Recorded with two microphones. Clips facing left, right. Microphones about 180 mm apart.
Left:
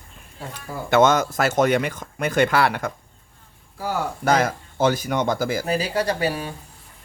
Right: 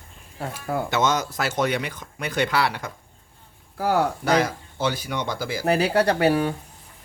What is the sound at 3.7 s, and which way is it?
Speech, 65° right (ahead or behind).